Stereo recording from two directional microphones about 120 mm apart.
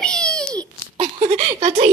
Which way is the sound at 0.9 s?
65° right (ahead or behind).